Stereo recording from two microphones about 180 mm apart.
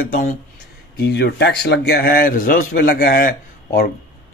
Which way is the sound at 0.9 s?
65° left (ahead or behind).